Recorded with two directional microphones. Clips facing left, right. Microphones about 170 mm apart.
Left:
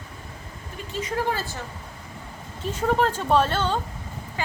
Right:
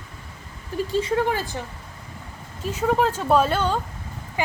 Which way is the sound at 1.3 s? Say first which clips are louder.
Right 4 dB; 15° right (ahead or behind).